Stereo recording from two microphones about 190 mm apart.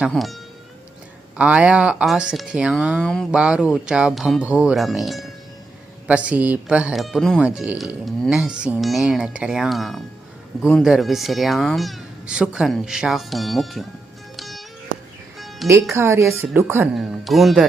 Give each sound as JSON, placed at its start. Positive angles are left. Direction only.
{"t": 0.0, "sound": "speech", "side_deg": 0}
{"t": 1.4, "sound": "speech", "side_deg": -5}
{"t": 14.3, "sound": "music", "side_deg": 0}
{"t": 15.6, "sound": "speech", "side_deg": -15}
{"t": 16.9, "sound": "speech", "side_deg": 0}